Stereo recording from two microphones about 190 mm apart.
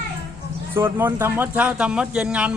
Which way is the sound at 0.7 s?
10° right (ahead or behind).